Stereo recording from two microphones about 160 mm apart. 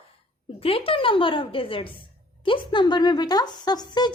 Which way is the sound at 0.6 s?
35° left (ahead or behind).